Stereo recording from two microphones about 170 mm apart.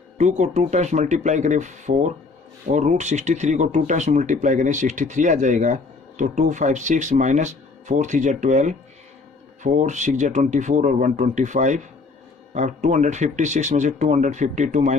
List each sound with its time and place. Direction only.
0.2 s speech: 45° right (ahead or behind)